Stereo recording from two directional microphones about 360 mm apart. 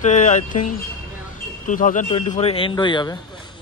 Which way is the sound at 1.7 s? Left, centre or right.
Left.